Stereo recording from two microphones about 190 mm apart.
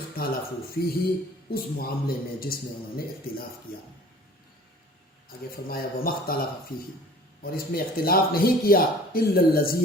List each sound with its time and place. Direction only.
0.2 s a sound: 50° left (ahead or behind)
0.7 s speech: 55° left (ahead or behind)
5.6 s speech: 50° left (ahead or behind)